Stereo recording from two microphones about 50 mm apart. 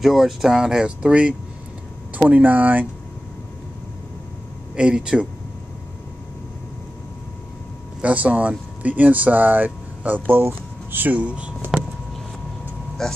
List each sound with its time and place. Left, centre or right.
0.0 s speech: centre; by 2.9 s right
4.7 s speech: centre
8.0 s speech: right
10.4 s a sound: right
11.1 s speech: right
11.7 s vehicle: centre
13.0 s speech: centre